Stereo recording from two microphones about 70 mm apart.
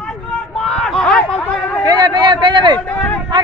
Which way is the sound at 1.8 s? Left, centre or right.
Right.